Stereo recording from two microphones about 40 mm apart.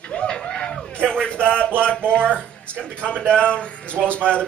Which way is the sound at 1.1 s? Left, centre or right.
Left.